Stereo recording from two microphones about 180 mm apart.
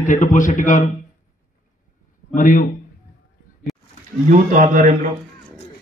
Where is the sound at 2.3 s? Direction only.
45° left (ahead or behind).